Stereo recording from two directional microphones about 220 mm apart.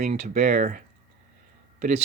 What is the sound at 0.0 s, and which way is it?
Speech, 35° right (ahead or behind).